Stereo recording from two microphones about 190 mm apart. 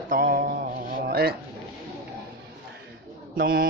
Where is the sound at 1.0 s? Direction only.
55° right (ahead or behind).